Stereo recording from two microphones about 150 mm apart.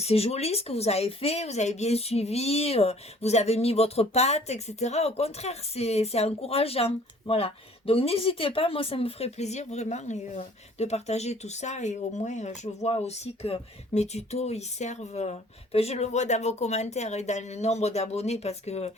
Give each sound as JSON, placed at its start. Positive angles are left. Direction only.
{"t": 0.0, "sound": "speech", "side_deg": 45}